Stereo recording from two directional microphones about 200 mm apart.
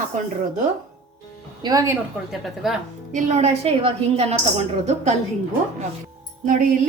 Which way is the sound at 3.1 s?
35° right (ahead or behind).